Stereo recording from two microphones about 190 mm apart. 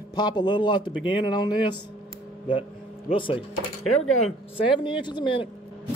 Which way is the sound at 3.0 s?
25° left (ahead or behind).